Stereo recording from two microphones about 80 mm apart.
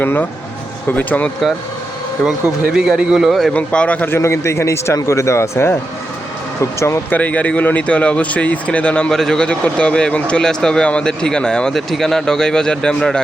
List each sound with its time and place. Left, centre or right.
0.0 s speech: left
2.7 s a man's voice: centre
3.5 s speech: centre
4.2 s a man's voice: left
7.2 s speech: centre